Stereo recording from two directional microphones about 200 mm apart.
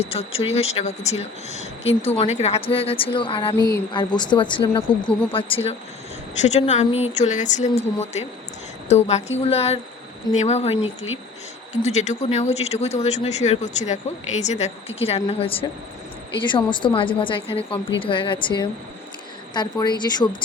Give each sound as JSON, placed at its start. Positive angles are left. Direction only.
{"t": 0.1, "sound": "speech", "side_deg": 30}
{"t": 4.9, "sound": "speech", "side_deg": 5}
{"t": 5.3, "sound": "speech", "side_deg": 25}